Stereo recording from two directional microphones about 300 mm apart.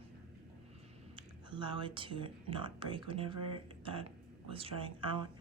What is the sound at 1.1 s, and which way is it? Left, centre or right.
Speech, centre.